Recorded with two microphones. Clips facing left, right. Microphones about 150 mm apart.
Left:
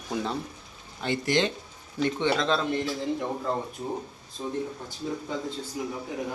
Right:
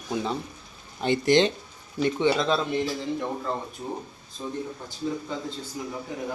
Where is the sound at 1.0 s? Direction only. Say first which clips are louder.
Right 5 dB; 20° right (ahead or behind).